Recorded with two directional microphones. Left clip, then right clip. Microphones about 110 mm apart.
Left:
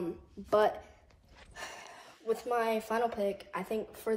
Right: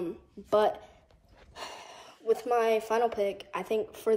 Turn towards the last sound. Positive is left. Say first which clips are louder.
# right 6 dB
turn(degrees=-35)  # may be behind; listen again after turning